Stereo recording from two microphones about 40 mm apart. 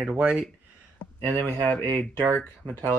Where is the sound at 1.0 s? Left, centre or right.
Right.